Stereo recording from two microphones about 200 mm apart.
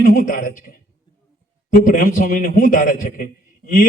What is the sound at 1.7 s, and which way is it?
Speech, 45° left (ahead or behind).